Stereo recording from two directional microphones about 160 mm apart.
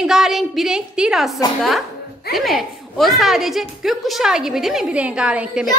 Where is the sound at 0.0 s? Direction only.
Centre (ahead or behind).